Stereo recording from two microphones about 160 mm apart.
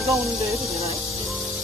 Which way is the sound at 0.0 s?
Centre (ahead or behind).